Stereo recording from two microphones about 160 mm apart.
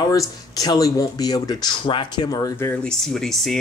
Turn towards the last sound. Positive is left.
turn(degrees=0)  # may be behind; listen again after turning